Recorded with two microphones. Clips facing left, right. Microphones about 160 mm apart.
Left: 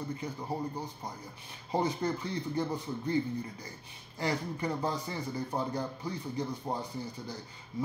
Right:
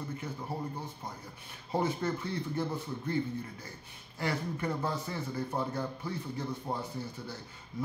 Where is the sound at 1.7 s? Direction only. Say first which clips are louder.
Left 1 dB; 15° left (ahead or behind).